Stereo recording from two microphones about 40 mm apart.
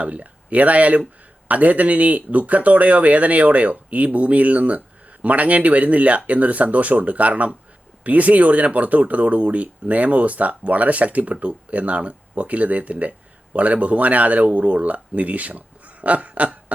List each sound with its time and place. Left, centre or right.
0.0 s speech: right